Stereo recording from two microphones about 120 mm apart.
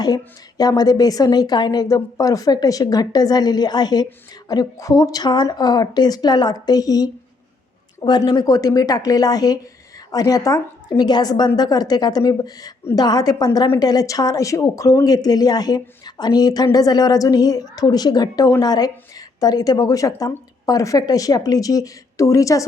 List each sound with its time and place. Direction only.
0.0 s a woman's voice: 35° left (ahead or behind)